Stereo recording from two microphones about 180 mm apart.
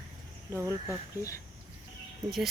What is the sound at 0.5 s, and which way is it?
Speech, 15° right (ahead or behind).